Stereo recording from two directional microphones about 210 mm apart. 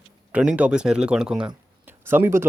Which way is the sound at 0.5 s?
5° right (ahead or behind).